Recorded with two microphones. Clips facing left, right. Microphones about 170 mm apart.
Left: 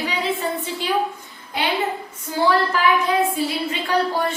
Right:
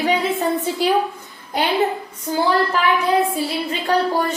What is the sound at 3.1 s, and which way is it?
A woman's voice, 40° right (ahead or behind).